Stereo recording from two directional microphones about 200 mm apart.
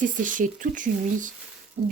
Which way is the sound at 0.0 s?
40° right (ahead or behind).